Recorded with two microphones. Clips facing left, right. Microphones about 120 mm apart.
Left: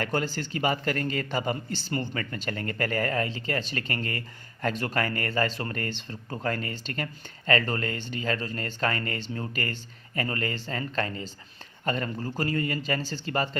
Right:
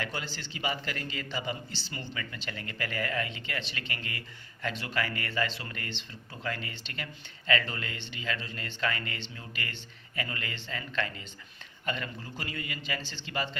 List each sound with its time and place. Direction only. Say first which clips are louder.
0.0 s speech: left 8 dB; 45° left (ahead or behind)